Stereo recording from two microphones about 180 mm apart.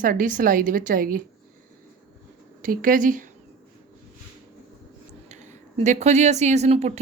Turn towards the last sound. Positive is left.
turn(degrees=-35)  # may be behind; listen again after turning